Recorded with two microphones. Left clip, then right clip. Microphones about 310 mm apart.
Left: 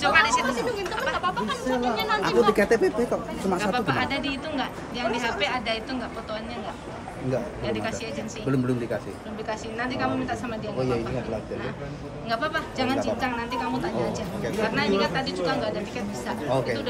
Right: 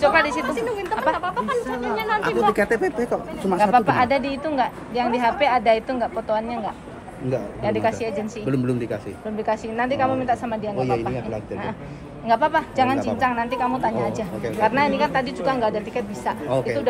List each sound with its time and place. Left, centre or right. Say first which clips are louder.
0.0 s a woman's voice: right 2 dB; centre
1.0 s chatter: right 4 dB; right
2.2 s a woman's voice: even; centre
12.3 s a woman's voice: right 8 dB; centre